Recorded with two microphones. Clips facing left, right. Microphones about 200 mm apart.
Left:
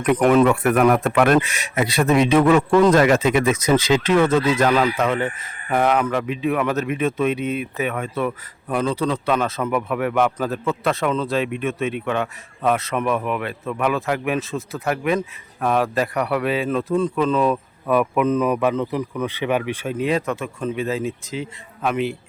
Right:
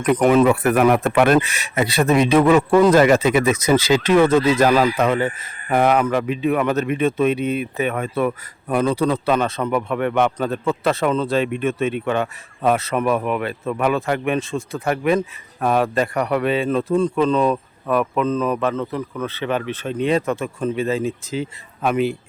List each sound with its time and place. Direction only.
0.0 s a man's voice: centre (ahead or behind)
7.9 s speech: 45° right (ahead or behind)
8.9 s a man's voice: 10° right (ahead or behind)